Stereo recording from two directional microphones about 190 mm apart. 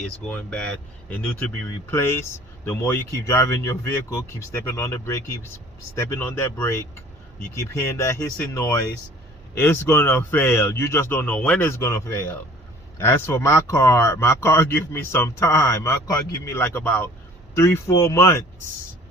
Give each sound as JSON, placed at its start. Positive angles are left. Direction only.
{"t": 0.0, "sound": "speech", "side_deg": 5}
{"t": 1.9, "sound": "speech", "side_deg": 10}